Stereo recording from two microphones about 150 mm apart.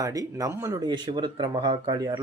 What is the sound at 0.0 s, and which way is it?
Speech, 25° right (ahead or behind).